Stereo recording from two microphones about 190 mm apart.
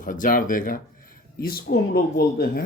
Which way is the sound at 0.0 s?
45° left (ahead or behind).